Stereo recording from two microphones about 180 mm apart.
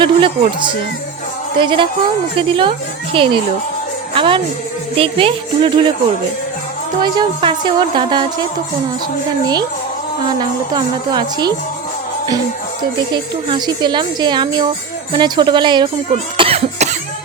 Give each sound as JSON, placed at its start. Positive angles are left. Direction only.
{"t": 0.0, "sound": "a woman's voice", "side_deg": -25}
{"t": 7.0, "sound": "a woman's voice", "side_deg": -25}
{"t": 10.2, "sound": "a woman's voice", "side_deg": -25}
{"t": 13.1, "sound": "a woman's voice", "side_deg": -25}
{"t": 16.4, "sound": "cough", "side_deg": -35}